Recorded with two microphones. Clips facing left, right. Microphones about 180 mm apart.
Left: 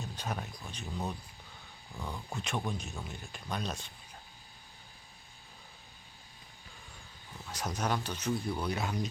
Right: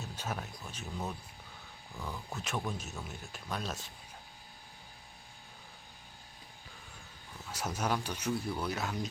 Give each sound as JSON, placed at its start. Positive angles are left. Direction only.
{"t": 0.0, "sound": "speech", "side_deg": -5}
{"t": 2.0, "sound": "speech", "side_deg": 0}
{"t": 7.5, "sound": "speech", "side_deg": -5}